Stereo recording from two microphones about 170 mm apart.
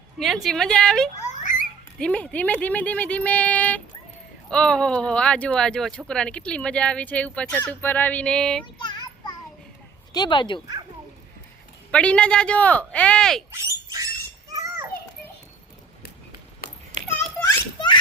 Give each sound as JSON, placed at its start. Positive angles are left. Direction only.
{"t": 0.2, "sound": "speech", "side_deg": 0}
{"t": 1.3, "sound": "a sound", "side_deg": 50}
{"t": 2.0, "sound": "speech", "side_deg": 5}
{"t": 8.6, "sound": "child singing", "side_deg": 25}
{"t": 10.1, "sound": "speech", "side_deg": 25}
{"t": 11.9, "sound": "speech", "side_deg": 5}
{"t": 13.5, "sound": "bird", "side_deg": -20}
{"t": 17.4, "sound": "children playing", "side_deg": 10}